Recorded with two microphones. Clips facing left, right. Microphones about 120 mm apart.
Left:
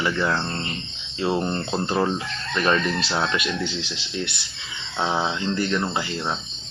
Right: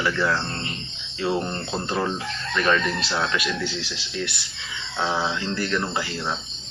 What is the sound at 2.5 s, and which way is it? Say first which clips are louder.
Speech: even; 30° left (ahead or behind).